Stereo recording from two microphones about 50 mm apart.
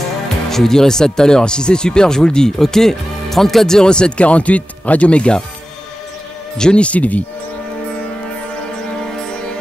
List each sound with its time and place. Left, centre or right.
0.5 s speech: centre
6.6 s speech: left
8.9 s music: centre